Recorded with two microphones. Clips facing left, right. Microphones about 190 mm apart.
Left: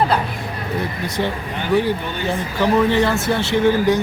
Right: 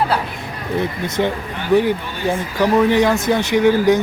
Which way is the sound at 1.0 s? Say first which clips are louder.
Right 3 dB; 20° right (ahead or behind).